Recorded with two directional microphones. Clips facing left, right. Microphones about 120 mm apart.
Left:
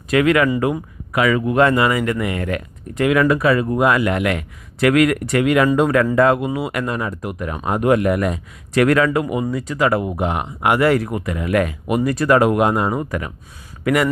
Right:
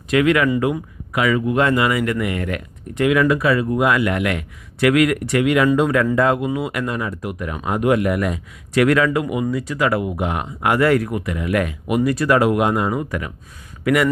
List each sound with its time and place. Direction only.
0.1 s speech: 40° left (ahead or behind)
3.0 s speech: 45° left (ahead or behind)
10.3 s speech: 20° left (ahead or behind); by 14.1 s 35° left (ahead or behind)